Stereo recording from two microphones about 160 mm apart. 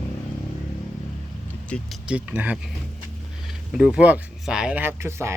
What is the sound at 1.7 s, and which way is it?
Speech, 10° left (ahead or behind).